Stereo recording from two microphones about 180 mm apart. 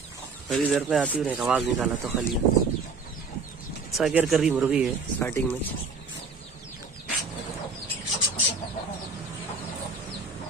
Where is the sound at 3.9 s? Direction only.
Centre (ahead or behind).